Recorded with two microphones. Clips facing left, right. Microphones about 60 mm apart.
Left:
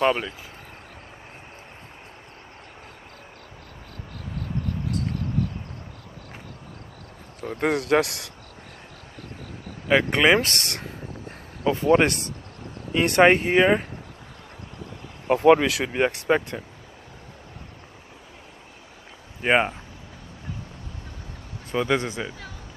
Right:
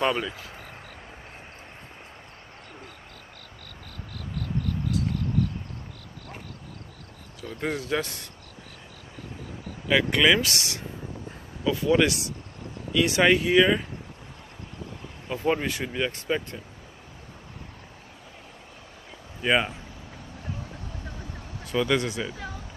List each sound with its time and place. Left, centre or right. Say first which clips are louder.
0.0 s speech: left 3 dB; left
7.3 s speech: left 6 dB; left
9.8 s speech: left 2 dB; left
11.6 s speech: left 3 dB; left
13.2 s speech: left 3 dB; left
15.2 s speech: left 9 dB; left
15.9 s speech: left 7 dB; left
19.4 s speech: left 3 dB; left
21.6 s speech: left 1 dB; left